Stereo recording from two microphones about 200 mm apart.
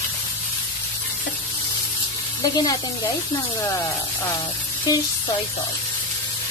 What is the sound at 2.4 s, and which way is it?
Speech, 20° left (ahead or behind).